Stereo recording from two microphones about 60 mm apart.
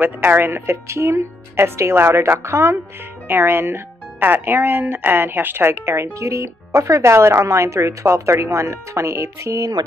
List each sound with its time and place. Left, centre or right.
0.0 s speech: right
6.1 s speech: right
9.8 s speech: right